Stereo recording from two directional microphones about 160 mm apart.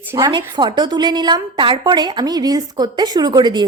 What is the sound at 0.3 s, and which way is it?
A woman's voice, 30° right (ahead or behind).